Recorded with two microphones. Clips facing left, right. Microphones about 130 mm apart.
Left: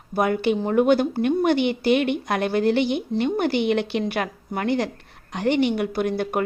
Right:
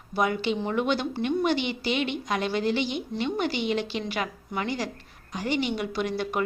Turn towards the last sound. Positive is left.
turn(degrees=50)  # may be behind; listen again after turning